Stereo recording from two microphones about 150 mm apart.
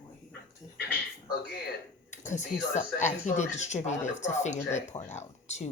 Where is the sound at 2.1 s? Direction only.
55° left (ahead or behind).